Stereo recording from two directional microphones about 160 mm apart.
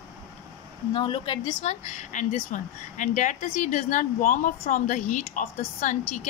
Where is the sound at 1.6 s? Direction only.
50° left (ahead or behind).